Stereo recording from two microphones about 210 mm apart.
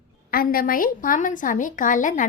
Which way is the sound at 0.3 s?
45° left (ahead or behind).